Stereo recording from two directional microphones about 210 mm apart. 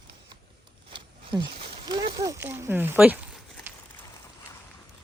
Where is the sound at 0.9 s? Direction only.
20° right (ahead or behind).